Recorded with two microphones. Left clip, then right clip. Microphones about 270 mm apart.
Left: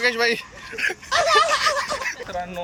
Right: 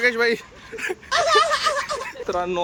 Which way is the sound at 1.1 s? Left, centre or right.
Centre.